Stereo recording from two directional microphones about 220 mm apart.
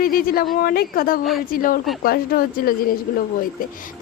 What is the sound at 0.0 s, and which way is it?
Speech, 40° left (ahead or behind).